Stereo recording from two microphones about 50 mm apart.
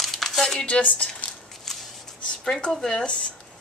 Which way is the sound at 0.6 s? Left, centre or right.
Left.